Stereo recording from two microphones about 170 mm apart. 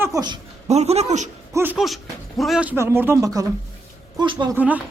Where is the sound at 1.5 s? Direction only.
15° right (ahead or behind).